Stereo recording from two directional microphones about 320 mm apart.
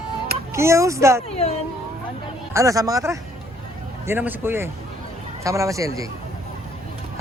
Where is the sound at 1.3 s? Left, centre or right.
Centre.